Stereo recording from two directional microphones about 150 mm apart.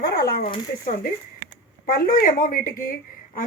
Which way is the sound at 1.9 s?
70° left (ahead or behind).